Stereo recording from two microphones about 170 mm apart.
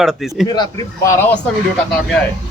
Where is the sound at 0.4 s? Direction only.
25° left (ahead or behind).